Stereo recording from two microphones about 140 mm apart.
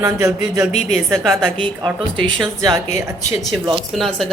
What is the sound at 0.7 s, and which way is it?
Speech, 55° left (ahead or behind).